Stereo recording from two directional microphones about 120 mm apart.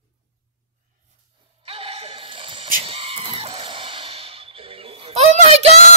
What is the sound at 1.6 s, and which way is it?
Neigh, 50° right (ahead or behind).